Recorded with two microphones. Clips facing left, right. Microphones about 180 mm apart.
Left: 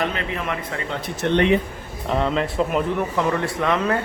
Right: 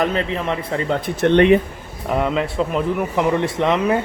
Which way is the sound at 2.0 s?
5° right (ahead or behind).